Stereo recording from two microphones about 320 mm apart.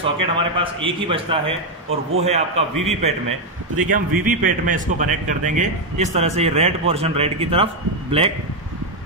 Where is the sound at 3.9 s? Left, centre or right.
Right.